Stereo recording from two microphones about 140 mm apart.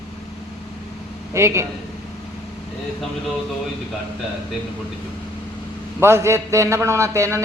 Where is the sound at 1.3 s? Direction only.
20° right (ahead or behind).